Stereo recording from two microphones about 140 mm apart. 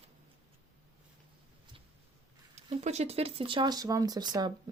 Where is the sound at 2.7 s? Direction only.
50° right (ahead or behind).